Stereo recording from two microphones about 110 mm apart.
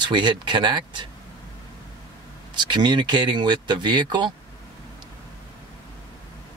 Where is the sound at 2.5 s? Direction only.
45° right (ahead or behind).